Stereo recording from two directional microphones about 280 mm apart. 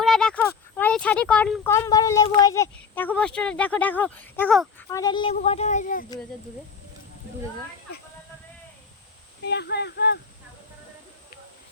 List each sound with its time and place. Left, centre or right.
0.0 s speech: centre
4.9 s a woman's voice: centre
9.4 s speech: left